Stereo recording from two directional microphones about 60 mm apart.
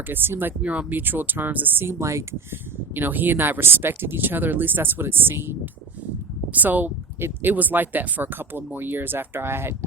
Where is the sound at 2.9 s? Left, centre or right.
Right.